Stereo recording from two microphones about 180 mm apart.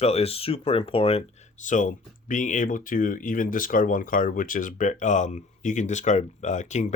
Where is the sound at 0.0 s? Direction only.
35° left (ahead or behind).